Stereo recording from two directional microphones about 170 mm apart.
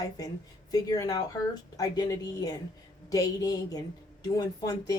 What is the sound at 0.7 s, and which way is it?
Speech, 20° left (ahead or behind).